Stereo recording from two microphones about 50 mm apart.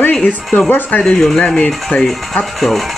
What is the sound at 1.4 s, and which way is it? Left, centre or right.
Speech, left.